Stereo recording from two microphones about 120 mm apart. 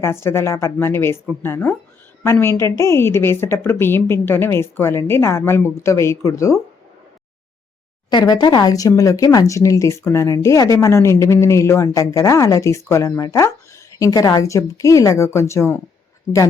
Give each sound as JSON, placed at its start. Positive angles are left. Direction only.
{"t": 0.0, "sound": "speech", "side_deg": 20}
{"t": 8.1, "sound": "speech", "side_deg": 35}